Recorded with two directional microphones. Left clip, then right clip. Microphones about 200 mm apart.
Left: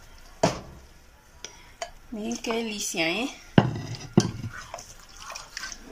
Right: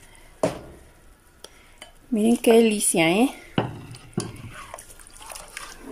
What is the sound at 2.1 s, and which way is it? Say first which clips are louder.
Speech: right 13 dB; 40° right (ahead or behind).